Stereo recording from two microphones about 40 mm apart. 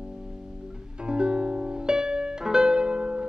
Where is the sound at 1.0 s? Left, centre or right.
Right.